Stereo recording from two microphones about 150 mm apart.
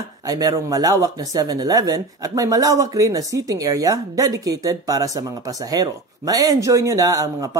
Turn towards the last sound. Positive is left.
turn(degrees=-25)  # may be behind; listen again after turning